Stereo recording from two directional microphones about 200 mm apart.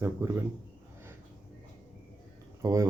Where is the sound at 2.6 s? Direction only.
15° right (ahead or behind).